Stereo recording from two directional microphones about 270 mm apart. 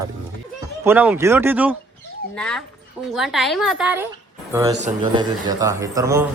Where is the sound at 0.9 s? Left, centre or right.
Centre.